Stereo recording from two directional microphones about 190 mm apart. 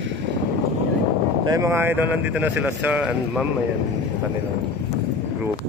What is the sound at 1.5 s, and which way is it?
Speech, 15° right (ahead or behind).